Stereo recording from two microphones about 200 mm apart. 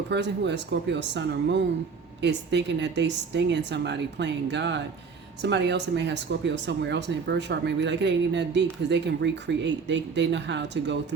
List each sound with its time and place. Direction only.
0.1 s speech: 60° right (ahead or behind)